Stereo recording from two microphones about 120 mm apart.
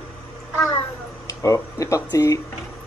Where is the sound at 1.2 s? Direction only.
25° left (ahead or behind).